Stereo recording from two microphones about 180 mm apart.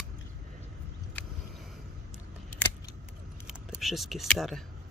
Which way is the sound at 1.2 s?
10° left (ahead or behind).